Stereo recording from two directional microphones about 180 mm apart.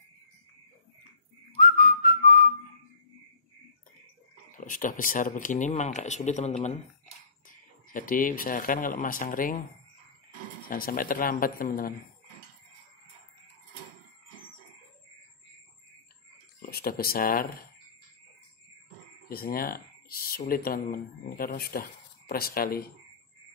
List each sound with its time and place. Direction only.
1.6 s whistling: 55° left (ahead or behind)
4.6 s speech: 50° left (ahead or behind)
10.7 s speech: 50° left (ahead or behind)
16.5 s speech: 55° left (ahead or behind)
19.2 s speech: 55° left (ahead or behind)